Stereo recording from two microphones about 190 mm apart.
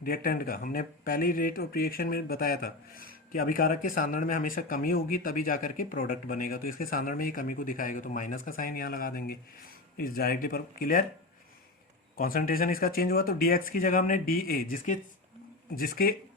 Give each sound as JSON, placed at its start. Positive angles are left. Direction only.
{"t": 0.0, "sound": "speech", "side_deg": 50}
{"t": 12.1, "sound": "speech", "side_deg": 50}